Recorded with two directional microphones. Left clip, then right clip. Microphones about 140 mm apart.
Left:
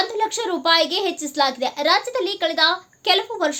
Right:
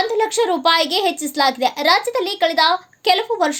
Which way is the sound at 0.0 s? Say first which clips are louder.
Right 5 dB; 35° right (ahead or behind).